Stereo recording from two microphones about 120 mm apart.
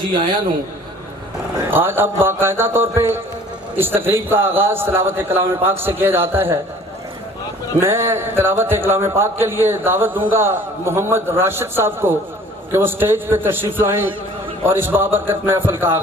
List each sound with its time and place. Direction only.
1.7 s music: 20° right (ahead or behind)
3.8 s a man's voice: 20° right (ahead or behind)
7.8 s music: 20° right (ahead or behind)
12.7 s a man's voice: 20° right (ahead or behind)
14.7 s music: 15° right (ahead or behind)